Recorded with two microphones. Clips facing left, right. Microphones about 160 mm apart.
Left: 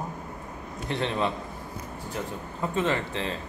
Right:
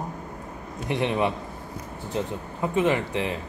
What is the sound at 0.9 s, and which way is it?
Speech, 15° right (ahead or behind).